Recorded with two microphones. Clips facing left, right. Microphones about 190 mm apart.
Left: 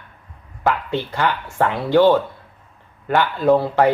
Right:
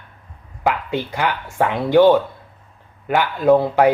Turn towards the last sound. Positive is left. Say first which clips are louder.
# right 2 dB
turn(degrees=-15)  # may be behind; listen again after turning